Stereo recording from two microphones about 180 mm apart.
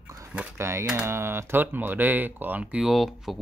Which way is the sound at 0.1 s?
15° right (ahead or behind).